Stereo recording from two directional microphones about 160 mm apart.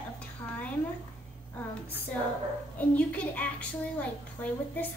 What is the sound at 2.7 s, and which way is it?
A woman's voice, 10° left (ahead or behind).